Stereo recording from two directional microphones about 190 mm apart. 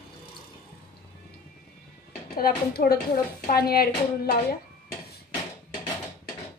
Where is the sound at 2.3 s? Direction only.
50° left (ahead or behind).